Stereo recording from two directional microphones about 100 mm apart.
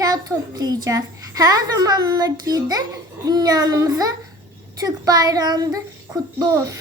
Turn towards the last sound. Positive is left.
turn(degrees=-30)  # may be behind; listen again after turning